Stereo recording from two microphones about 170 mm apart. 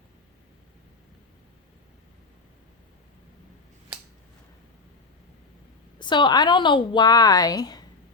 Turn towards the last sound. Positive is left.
turn(degrees=25)  # may be behind; listen again after turning